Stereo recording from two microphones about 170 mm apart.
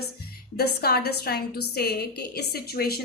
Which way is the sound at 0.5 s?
65° left (ahead or behind).